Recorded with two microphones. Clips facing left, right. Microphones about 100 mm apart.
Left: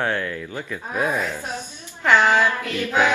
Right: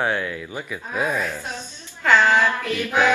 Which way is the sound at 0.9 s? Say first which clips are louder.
Left 1 dB; 15° left (ahead or behind).